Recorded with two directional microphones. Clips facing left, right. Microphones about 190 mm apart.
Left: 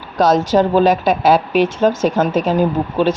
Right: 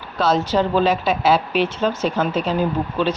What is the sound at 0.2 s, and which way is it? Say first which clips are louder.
A woman's voice: left 5 dB; 45° left (ahead or behind).